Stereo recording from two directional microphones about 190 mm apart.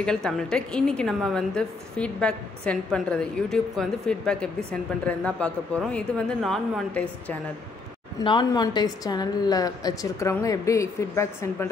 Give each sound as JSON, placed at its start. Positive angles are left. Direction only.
{"t": 0.0, "sound": "a woman's voice", "side_deg": 5}
{"t": 8.2, "sound": "a woman's voice", "side_deg": 25}